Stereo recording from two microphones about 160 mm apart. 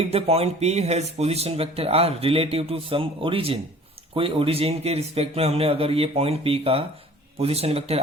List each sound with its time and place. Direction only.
0.0 s speech: 40° right (ahead or behind)